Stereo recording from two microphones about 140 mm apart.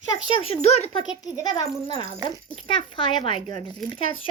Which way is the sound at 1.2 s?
25° left (ahead or behind).